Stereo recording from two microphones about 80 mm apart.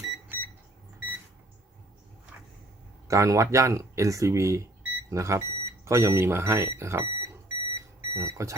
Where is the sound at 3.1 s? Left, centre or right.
Right.